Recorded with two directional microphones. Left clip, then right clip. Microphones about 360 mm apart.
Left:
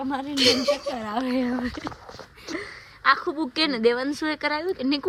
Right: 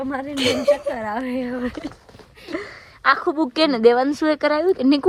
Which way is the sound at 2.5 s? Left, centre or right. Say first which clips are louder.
Right 4 dB; centre.